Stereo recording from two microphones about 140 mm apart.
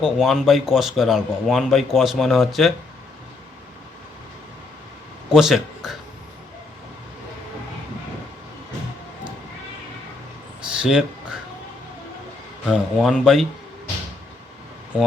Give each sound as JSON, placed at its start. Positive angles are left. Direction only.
{"t": 0.0, "sound": "a man's voice", "side_deg": -5}
{"t": 5.3, "sound": "speech", "side_deg": 0}
{"t": 10.8, "sound": "speech", "side_deg": -5}
{"t": 12.6, "sound": "a man's voice", "side_deg": 0}